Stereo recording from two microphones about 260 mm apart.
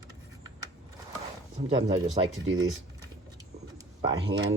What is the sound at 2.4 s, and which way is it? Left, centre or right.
Speech, right.